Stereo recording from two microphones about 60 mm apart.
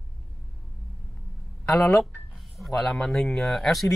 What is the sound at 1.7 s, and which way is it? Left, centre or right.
Speech, centre.